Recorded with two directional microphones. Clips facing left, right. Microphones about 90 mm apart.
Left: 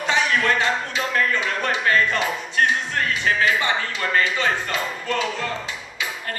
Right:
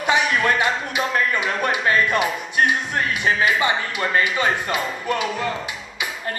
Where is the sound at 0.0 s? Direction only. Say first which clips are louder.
Right 2 dB; 15° right (ahead or behind).